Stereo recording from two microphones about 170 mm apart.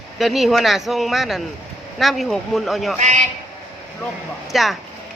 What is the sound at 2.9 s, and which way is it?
Speech, 45° right (ahead or behind).